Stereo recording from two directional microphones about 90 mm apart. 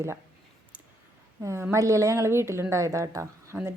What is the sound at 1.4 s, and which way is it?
A woman's voice, 30° right (ahead or behind).